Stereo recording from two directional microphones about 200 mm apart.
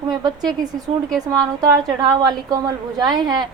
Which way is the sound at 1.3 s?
20° right (ahead or behind).